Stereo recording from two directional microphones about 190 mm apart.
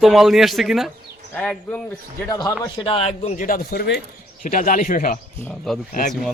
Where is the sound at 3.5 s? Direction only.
50° left (ahead or behind).